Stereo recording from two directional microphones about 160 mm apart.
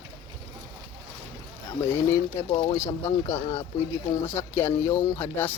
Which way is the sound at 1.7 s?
15° left (ahead or behind).